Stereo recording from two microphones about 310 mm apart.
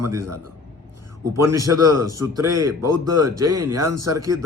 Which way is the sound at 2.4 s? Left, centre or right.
Right.